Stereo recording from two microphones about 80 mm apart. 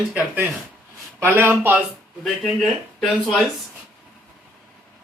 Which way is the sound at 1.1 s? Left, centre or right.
Right.